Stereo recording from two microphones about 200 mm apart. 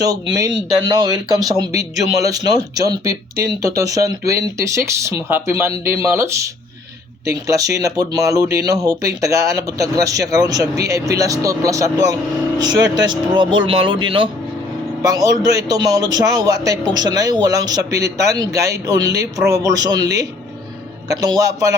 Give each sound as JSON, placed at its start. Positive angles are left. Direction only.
{"t": 0.3, "sound": "speech", "side_deg": -20}
{"t": 21.1, "sound": "speech", "side_deg": -20}